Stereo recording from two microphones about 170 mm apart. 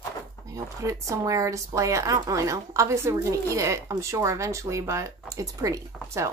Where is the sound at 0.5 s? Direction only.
20° right (ahead or behind).